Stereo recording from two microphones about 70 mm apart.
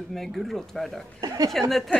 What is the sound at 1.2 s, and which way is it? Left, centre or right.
Speech, right.